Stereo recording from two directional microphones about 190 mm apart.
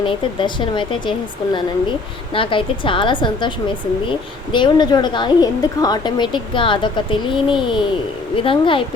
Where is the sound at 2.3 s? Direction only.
25° left (ahead or behind).